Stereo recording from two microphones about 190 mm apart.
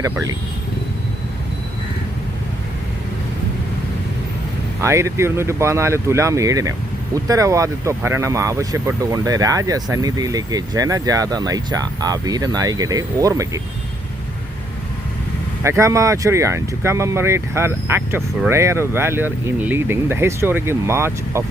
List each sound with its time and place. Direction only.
4.8 s speech: 15° right (ahead or behind)
15.6 s speech: 15° right (ahead or behind)